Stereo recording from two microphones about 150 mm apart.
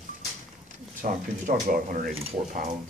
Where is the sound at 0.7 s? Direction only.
60° right (ahead or behind).